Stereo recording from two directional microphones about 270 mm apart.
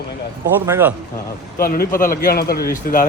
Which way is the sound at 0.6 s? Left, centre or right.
Centre.